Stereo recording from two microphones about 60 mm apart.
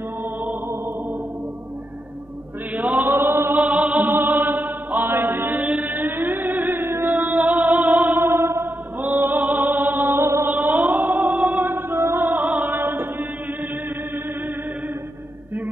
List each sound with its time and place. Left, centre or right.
2.7 s chant: right
3.5 s music: right
4.1 s chant: right
5.9 s music: right
8.2 s music: right
9.0 s music: right
10.5 s music: right